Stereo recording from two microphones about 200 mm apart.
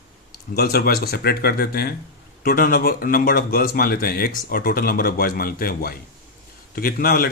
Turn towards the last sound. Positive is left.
turn(degrees=50)  # may be behind; listen again after turning